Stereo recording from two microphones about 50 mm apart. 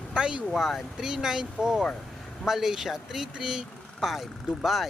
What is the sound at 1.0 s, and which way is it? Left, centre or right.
Speech, centre.